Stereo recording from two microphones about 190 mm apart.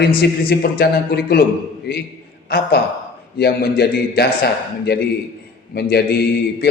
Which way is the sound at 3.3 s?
55° left (ahead or behind).